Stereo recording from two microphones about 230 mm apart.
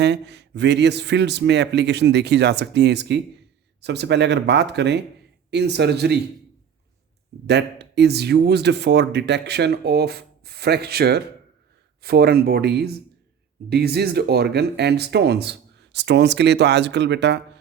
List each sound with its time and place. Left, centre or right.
0.0 s speech: right
7.4 s speech: right